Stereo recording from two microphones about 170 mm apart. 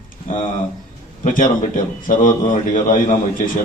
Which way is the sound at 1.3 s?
50° left (ahead or behind).